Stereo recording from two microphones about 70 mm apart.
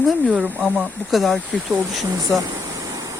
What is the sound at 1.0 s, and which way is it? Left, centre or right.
Speech, centre.